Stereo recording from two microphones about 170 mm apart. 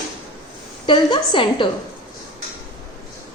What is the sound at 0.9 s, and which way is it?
Speech, 30° left (ahead or behind).